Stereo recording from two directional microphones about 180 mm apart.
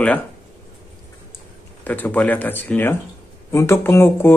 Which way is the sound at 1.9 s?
10° left (ahead or behind).